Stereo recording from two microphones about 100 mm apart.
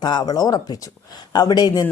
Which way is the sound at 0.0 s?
45° left (ahead or behind).